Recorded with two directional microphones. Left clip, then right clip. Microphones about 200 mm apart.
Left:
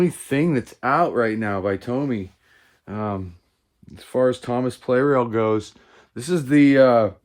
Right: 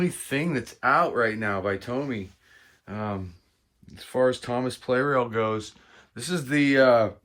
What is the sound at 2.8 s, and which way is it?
Speech, 40° left (ahead or behind).